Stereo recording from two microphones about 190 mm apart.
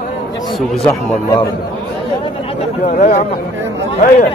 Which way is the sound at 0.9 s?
20° left (ahead or behind).